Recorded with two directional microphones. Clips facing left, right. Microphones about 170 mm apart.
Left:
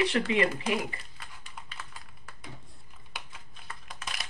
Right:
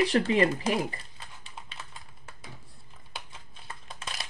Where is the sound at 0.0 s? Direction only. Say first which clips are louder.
Right 3 dB; 35° right (ahead or behind).